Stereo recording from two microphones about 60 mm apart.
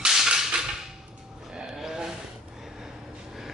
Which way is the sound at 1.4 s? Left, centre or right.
Centre.